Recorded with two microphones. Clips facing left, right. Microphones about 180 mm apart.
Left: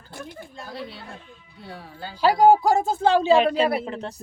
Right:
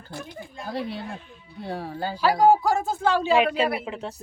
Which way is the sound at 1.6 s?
45° right (ahead or behind).